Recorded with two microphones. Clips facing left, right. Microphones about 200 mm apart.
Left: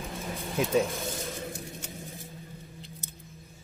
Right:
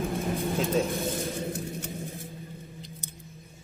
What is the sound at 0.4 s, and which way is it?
Speech, 30° right (ahead or behind).